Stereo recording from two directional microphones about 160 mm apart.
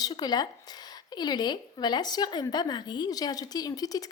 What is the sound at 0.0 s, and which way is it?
A woman's voice, 25° left (ahead or behind).